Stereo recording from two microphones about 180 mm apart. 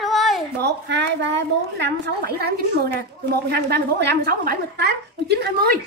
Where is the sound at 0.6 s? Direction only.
75° right (ahead or behind).